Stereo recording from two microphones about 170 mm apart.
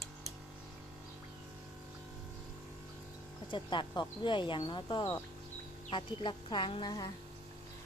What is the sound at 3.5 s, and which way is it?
Speech, 30° left (ahead or behind).